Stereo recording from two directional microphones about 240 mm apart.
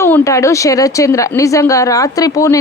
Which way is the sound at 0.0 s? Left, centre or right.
Centre.